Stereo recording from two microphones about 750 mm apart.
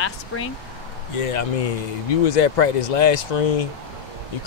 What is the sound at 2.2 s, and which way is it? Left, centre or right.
Speech, left.